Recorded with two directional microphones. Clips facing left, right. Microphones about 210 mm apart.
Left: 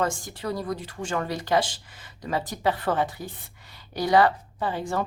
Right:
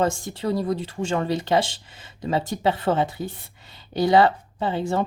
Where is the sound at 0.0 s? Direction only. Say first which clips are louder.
Right 4 dB; 25° right (ahead or behind).